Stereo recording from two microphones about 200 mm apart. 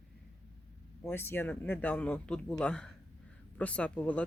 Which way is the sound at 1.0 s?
10° left (ahead or behind).